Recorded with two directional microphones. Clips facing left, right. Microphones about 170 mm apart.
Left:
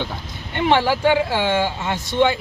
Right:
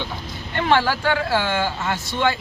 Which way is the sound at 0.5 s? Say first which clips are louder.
Left 2 dB; 20° left (ahead or behind).